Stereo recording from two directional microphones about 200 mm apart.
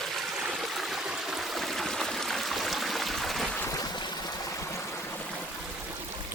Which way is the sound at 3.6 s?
15° left (ahead or behind).